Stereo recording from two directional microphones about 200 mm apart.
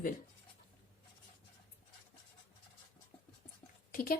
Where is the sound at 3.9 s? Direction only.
45° left (ahead or behind).